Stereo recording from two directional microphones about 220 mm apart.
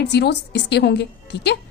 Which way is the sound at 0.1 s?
50° left (ahead or behind).